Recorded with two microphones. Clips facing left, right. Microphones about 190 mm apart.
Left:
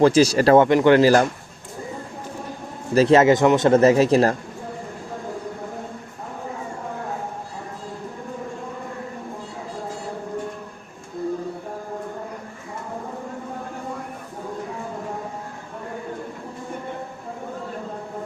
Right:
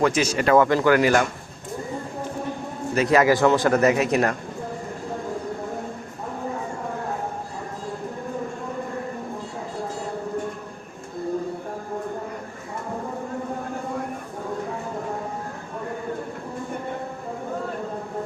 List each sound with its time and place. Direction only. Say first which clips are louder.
0.0 s speech: left 6 dB; 35° left (ahead or behind)
2.9 s a man's voice: left 4 dB; 30° left (ahead or behind)